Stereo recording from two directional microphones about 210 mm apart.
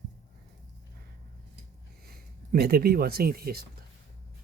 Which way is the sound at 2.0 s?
45° right (ahead or behind).